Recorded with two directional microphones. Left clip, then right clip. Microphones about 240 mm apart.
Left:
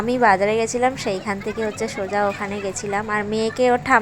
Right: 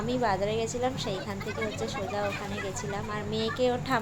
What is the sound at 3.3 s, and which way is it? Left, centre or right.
Speech, left.